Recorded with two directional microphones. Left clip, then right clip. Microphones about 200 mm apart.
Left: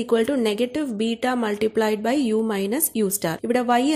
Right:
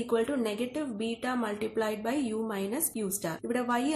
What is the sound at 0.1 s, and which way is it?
Speech, 40° left (ahead or behind).